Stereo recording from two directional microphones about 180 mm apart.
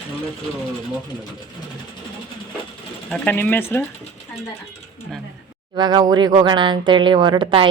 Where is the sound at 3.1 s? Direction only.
10° left (ahead or behind).